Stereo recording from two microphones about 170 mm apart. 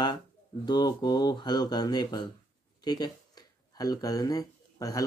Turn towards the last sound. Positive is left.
turn(degrees=20)  # may be behind; listen again after turning